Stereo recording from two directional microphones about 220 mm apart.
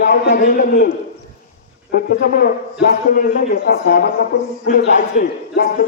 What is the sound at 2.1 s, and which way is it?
A man's voice, 40° left (ahead or behind).